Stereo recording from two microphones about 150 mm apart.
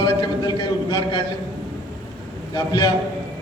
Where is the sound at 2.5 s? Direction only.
30° left (ahead or behind).